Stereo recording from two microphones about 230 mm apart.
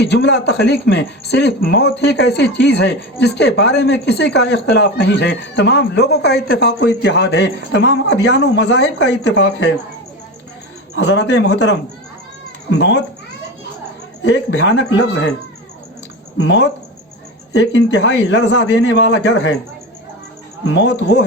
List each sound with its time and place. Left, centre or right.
0.0 s speech: left
10.9 s speech: left
14.3 s speech: left
16.4 s speech: left
20.7 s speech: left